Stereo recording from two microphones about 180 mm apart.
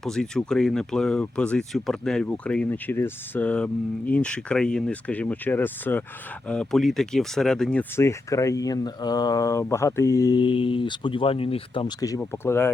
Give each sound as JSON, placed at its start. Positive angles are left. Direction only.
{"t": 0.0, "sound": "speech", "side_deg": 5}